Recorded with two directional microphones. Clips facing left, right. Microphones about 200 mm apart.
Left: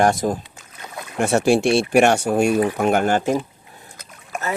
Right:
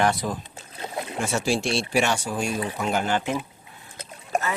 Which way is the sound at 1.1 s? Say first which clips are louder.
Left 9 dB; 60° left (ahead or behind).